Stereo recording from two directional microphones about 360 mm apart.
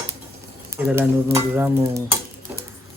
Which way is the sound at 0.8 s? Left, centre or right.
Centre.